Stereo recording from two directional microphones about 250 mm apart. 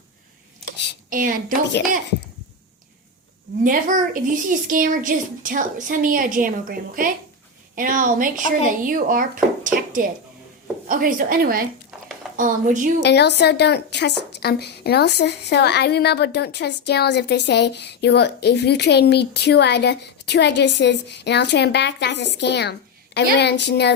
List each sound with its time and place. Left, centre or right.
1.1 s a woman's voice: right
3.6 s a woman's voice: right
13.0 s a woman's voice: left